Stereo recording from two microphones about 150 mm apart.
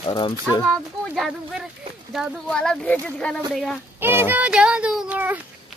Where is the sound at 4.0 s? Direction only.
15° right (ahead or behind).